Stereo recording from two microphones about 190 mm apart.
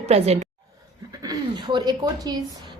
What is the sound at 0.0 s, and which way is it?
A woman's voice, 35° right (ahead or behind).